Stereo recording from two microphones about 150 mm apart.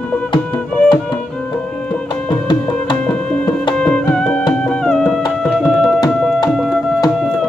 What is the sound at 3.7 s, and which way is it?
Music, 5° left (ahead or behind).